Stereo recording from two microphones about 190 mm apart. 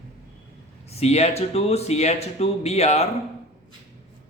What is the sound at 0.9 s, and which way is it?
Speech, 35° left (ahead or behind).